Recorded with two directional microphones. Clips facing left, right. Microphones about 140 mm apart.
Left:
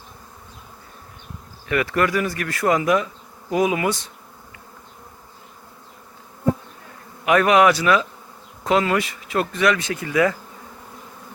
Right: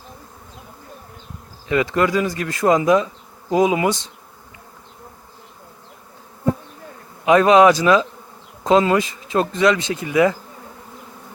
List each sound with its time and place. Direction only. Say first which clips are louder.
1.6 s speech: right 2 dB; 20° right (ahead or behind)
7.3 s speech: right 4 dB; 25° right (ahead or behind)